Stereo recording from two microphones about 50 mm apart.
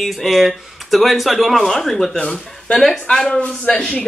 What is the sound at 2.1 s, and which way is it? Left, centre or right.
Speech, centre.